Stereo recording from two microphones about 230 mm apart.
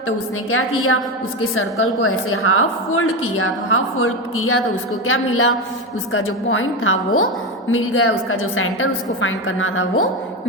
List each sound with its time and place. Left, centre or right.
0.5 s a woman's voice: left